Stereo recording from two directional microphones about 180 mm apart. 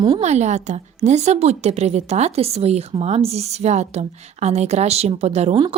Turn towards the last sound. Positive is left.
turn(degrees=-35)  # may be behind; listen again after turning